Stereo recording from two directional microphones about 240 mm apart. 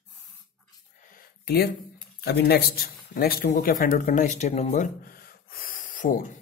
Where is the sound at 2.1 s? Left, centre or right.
Left.